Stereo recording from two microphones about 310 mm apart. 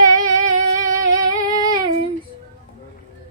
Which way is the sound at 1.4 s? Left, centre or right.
Centre.